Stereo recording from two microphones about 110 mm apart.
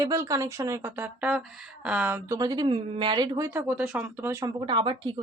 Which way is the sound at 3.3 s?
30° right (ahead or behind).